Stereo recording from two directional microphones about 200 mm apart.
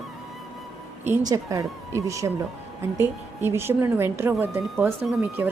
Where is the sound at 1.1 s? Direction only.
15° right (ahead or behind).